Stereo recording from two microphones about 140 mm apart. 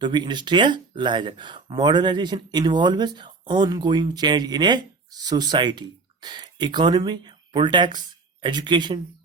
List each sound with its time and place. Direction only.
0.0 s speech: 30° right (ahead or behind)